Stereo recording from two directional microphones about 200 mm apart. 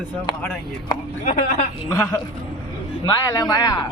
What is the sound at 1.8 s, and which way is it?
Speech, 15° left (ahead or behind).